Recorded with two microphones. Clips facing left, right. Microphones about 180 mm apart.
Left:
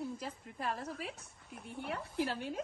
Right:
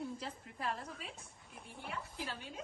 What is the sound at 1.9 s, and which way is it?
Speech, 55° left (ahead or behind).